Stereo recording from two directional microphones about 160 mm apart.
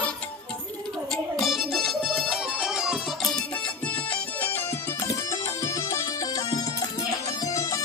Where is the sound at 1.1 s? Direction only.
Centre (ahead or behind).